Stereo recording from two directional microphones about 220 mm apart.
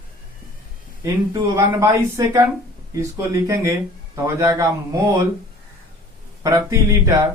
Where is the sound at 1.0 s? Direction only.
15° right (ahead or behind).